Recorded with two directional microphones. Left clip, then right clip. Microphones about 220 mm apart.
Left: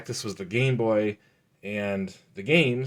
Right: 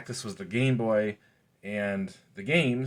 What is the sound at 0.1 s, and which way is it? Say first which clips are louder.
Speech: left 4 dB; 50° left (ahead or behind).